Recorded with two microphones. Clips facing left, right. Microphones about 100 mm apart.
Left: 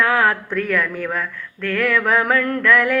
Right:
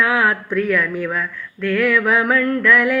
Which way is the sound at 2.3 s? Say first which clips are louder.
Right 1 dB; 55° left (ahead or behind).